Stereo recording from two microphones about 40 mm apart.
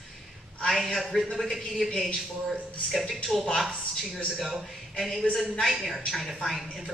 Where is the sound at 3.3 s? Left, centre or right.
Centre.